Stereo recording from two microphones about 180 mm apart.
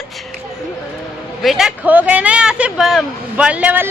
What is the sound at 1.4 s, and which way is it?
A man's voice, centre (ahead or behind).